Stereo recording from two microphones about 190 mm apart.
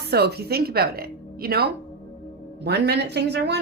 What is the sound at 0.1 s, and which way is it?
A woman's voice, 60° right (ahead or behind).